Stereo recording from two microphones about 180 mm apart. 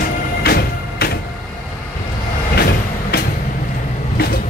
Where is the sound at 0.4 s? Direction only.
60° left (ahead or behind).